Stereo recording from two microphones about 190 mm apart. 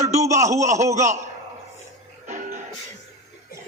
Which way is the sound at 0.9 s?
40° right (ahead or behind).